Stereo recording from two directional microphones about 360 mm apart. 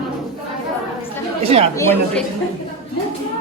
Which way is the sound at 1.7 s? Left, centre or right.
Centre.